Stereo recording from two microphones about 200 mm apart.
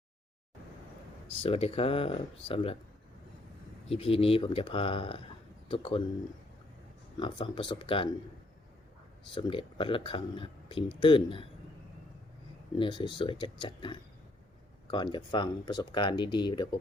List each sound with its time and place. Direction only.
1.3 s speech: 30° left (ahead or behind)
3.8 s speech: 30° left (ahead or behind)
7.2 s speech: 25° left (ahead or behind)
9.3 s speech: 25° left (ahead or behind)
12.8 s speech: 25° left (ahead or behind)